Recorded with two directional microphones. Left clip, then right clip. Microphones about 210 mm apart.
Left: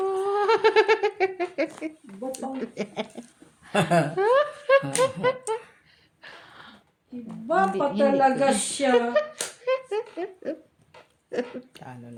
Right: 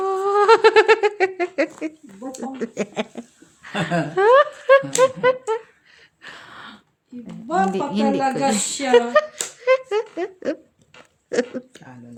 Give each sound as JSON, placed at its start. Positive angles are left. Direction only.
{"t": 0.0, "sound": "speech", "side_deg": -35}
{"t": 3.7, "sound": "speech", "side_deg": 40}
{"t": 4.1, "sound": "a sound", "side_deg": -40}
{"t": 4.9, "sound": "music", "side_deg": -35}
{"t": 6.2, "sound": "a sound", "side_deg": -35}
{"t": 7.3, "sound": "music", "side_deg": -35}
{"t": 7.7, "sound": "speech", "side_deg": -45}